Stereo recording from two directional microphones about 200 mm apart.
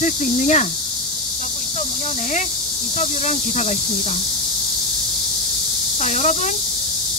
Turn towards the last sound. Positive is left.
turn(degrees=35)  # may be behind; listen again after turning